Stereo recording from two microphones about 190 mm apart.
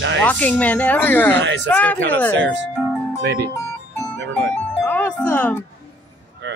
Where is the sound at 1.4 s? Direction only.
70° right (ahead or behind).